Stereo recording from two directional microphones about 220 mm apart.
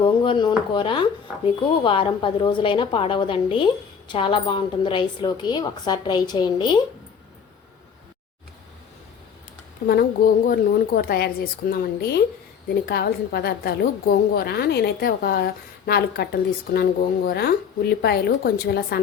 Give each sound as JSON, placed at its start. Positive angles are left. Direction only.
{"t": 0.0, "sound": "a woman's voice", "side_deg": 20}
{"t": 9.8, "sound": "a woman's voice", "side_deg": 40}